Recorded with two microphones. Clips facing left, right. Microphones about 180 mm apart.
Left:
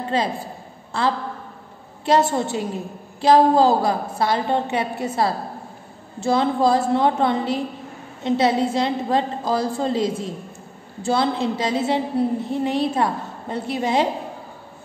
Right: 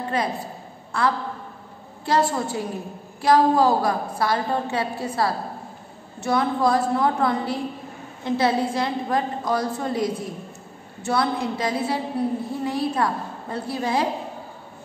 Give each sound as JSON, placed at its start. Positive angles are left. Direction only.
{"t": 0.1, "sound": "a woman's voice", "side_deg": 25}